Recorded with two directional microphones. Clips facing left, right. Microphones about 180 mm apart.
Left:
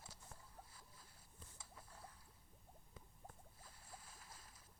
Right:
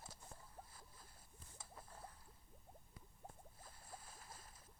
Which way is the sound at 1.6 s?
50° right (ahead or behind).